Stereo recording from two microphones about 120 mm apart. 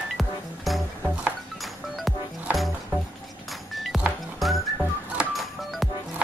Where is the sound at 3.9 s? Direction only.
Centre (ahead or behind).